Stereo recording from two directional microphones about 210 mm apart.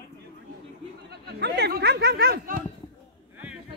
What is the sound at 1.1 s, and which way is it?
Speech, 50° right (ahead or behind).